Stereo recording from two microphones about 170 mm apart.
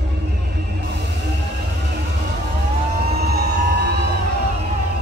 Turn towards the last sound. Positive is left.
turn(degrees=-75)  # may be behind; listen again after turning